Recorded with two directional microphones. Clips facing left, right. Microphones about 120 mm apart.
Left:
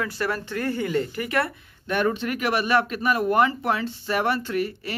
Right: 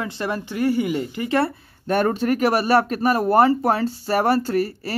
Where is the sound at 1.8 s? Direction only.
40° right (ahead or behind).